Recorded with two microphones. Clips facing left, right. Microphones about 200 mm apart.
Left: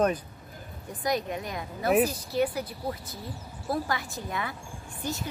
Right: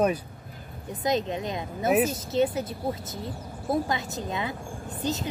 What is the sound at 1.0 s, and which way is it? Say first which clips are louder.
A woman's voice: right 3 dB; 20° right (ahead or behind).